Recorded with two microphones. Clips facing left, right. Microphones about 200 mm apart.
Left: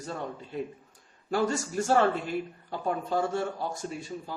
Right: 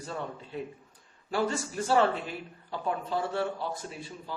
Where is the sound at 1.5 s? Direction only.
45° left (ahead or behind).